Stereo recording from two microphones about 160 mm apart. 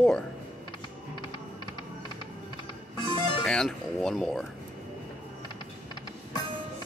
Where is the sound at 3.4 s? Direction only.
5° left (ahead or behind).